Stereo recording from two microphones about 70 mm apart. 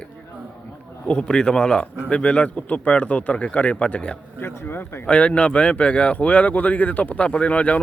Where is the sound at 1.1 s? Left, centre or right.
Centre.